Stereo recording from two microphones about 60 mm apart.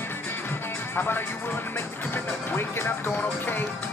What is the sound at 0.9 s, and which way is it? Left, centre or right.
Speech, left.